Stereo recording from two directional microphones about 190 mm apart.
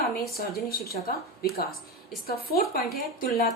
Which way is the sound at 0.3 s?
50° left (ahead or behind).